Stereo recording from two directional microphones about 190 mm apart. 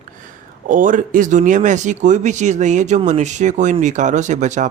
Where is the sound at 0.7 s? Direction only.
45° right (ahead or behind).